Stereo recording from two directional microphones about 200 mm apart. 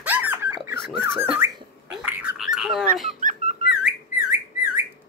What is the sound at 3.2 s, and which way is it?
Dog, 40° right (ahead or behind).